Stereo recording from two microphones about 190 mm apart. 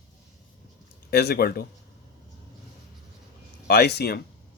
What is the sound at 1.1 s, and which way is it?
Speech, 55° left (ahead or behind).